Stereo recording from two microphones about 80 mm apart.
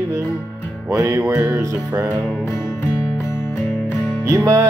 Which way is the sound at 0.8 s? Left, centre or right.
Right.